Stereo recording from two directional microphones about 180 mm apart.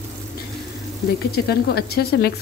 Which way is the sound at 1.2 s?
60° left (ahead or behind).